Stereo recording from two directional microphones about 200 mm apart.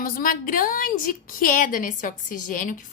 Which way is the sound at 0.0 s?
45° left (ahead or behind).